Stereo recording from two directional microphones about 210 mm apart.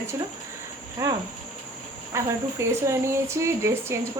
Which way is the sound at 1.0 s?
15° right (ahead or behind).